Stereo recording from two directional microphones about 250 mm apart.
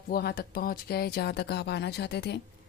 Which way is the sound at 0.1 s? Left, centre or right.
Left.